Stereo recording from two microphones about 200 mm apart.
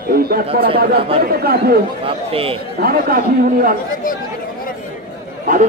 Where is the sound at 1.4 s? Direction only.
50° right (ahead or behind).